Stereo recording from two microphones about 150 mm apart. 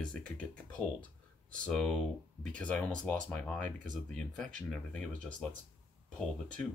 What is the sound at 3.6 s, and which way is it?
Speech, 60° right (ahead or behind).